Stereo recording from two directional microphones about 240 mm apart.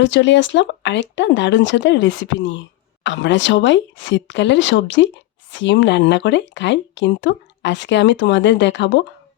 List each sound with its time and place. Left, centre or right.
0.0 s speech: left